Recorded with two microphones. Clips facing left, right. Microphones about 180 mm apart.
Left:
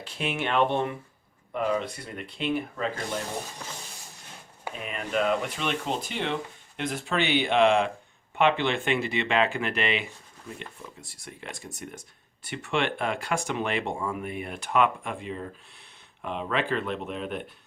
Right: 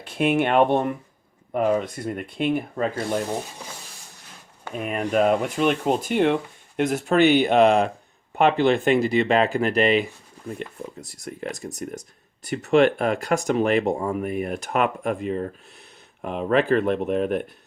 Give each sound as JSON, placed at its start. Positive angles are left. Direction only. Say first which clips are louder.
{"t": 0.0, "sound": "speech", "louder": "right 10 dB", "side_deg": -55}
{"t": 4.7, "sound": "speech", "louder": "right 7 dB", "side_deg": -45}